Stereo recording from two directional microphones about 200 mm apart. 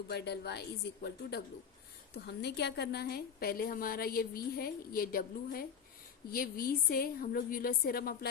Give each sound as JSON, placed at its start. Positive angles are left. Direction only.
{"t": 0.1, "sound": "a woman's voice", "side_deg": 55}